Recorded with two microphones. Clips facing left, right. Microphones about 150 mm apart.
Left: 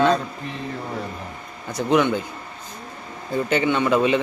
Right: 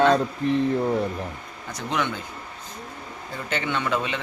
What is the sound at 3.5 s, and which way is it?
Speech, 10° left (ahead or behind).